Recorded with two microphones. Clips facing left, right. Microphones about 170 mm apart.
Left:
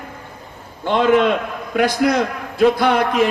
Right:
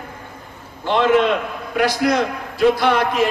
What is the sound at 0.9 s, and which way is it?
A man's voice, 50° left (ahead or behind).